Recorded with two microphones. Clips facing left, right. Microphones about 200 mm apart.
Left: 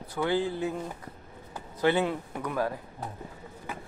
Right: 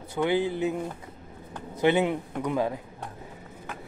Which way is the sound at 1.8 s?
20° right (ahead or behind).